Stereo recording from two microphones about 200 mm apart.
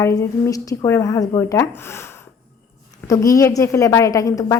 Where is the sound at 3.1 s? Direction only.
15° left (ahead or behind).